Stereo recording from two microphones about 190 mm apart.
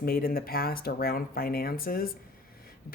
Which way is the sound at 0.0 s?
50° left (ahead or behind).